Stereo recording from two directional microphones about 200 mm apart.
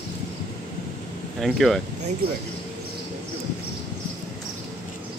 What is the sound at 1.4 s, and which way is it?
Speech, centre (ahead or behind).